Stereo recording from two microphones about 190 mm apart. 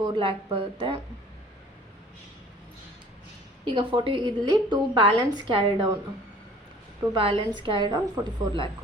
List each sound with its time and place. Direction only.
0.0 s a woman's voice: 25° right (ahead or behind)
3.7 s a woman's voice: 25° right (ahead or behind)
7.1 s a woman's voice: 30° right (ahead or behind)